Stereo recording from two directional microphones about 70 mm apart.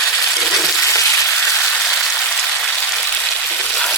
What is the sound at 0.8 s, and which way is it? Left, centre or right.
Frying, left.